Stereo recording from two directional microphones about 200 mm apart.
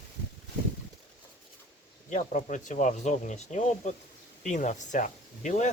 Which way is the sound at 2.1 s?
40° left (ahead or behind).